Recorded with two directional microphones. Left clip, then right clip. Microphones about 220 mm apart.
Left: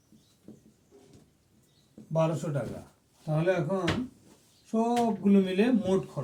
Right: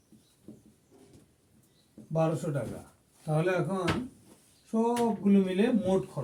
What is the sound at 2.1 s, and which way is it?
Speech, 10° right (ahead or behind).